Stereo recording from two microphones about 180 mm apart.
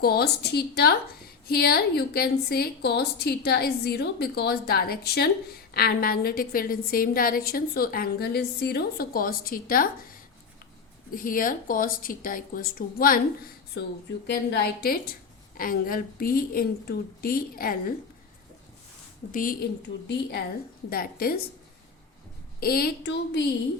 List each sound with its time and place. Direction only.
0.0 s a woman's voice: 60° left (ahead or behind)
11.1 s a woman's voice: 50° left (ahead or behind)
14.3 s a woman's voice: 65° left (ahead or behind)
19.3 s a woman's voice: 50° left (ahead or behind)
20.9 s a woman's voice: 55° left (ahead or behind)
22.6 s a woman's voice: 60° left (ahead or behind)